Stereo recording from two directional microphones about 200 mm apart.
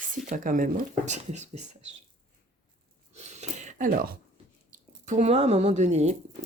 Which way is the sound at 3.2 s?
35° right (ahead or behind).